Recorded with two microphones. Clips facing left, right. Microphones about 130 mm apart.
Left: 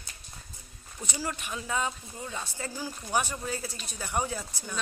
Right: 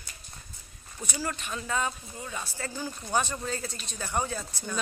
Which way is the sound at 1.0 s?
15° left (ahead or behind).